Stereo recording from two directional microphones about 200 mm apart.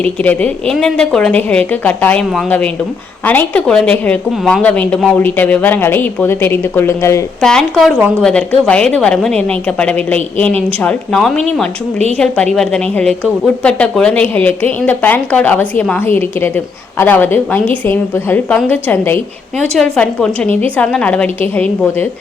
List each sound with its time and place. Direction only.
0.0 s speech: 5° left (ahead or behind)
7.4 s a woman's voice: centre (ahead or behind)